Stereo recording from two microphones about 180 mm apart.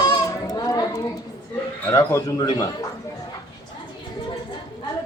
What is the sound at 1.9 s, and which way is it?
Speech, 20° left (ahead or behind).